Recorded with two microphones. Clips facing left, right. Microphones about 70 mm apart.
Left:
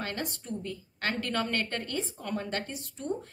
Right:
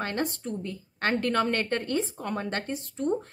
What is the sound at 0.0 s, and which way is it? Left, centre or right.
Speech, right.